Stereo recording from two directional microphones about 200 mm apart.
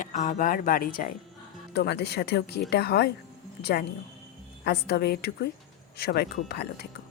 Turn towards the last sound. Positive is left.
turn(degrees=55)  # may be behind; listen again after turning